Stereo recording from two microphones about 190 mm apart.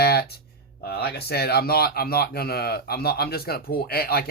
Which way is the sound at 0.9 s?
55° left (ahead or behind).